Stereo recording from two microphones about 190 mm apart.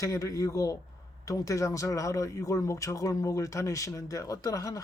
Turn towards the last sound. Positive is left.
turn(degrees=15)  # may be behind; listen again after turning